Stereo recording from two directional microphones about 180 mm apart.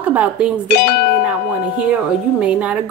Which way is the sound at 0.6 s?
65° left (ahead or behind).